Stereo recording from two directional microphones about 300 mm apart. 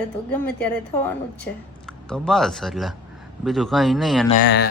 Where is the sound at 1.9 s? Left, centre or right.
Centre.